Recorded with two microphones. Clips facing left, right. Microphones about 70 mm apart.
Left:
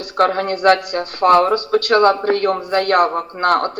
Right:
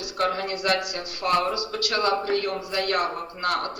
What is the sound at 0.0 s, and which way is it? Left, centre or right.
Speech, left.